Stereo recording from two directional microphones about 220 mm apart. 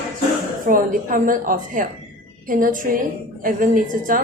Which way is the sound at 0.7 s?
40° right (ahead or behind).